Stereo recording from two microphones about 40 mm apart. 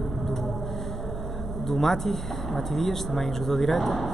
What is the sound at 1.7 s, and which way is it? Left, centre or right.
Speech, centre.